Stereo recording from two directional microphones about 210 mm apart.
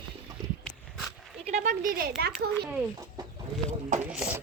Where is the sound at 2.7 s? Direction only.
15° right (ahead or behind).